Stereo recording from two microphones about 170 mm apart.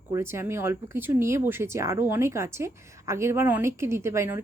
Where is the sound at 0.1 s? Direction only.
15° right (ahead or behind).